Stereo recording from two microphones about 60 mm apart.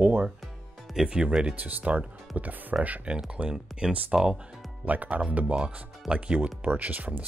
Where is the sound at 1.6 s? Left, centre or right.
Right; by 4.4 s centre.